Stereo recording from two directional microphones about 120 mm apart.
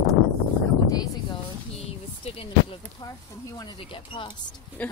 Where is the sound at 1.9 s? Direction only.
50° left (ahead or behind).